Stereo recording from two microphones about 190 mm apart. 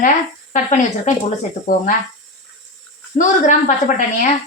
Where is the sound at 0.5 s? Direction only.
40° left (ahead or behind).